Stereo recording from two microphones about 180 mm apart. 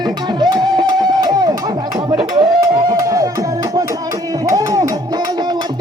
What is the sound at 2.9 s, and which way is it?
Music, 20° right (ahead or behind).